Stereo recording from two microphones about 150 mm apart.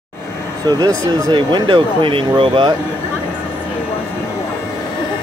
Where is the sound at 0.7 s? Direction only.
25° right (ahead or behind).